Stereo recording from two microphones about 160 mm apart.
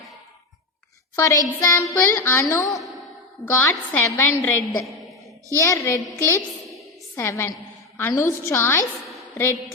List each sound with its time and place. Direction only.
1.1 s music: 20° left (ahead or behind)
2.6 s a woman's voice: centre (ahead or behind)
3.5 s a woman's voice: 15° left (ahead or behind)
5.5 s music: 20° left (ahead or behind)
7.2 s a woman's voice: 15° left (ahead or behind)